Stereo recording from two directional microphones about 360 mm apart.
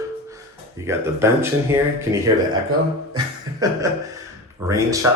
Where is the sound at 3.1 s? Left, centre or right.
Centre.